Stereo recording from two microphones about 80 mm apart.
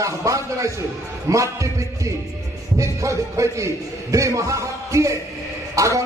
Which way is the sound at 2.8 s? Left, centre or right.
Right.